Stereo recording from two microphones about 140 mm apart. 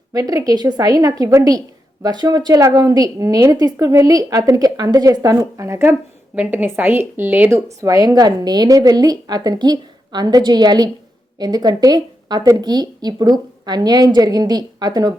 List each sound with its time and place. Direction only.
0.1 s a woman's voice: 25° right (ahead or behind)